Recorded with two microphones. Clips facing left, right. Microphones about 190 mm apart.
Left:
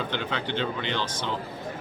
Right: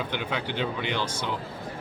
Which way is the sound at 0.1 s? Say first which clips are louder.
Left 1 dB; 10° right (ahead or behind).